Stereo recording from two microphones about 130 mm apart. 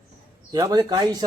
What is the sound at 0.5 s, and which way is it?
Speech, 30° right (ahead or behind).